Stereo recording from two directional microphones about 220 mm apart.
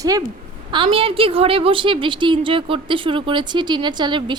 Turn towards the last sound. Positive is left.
turn(degrees=-20)  # may be behind; listen again after turning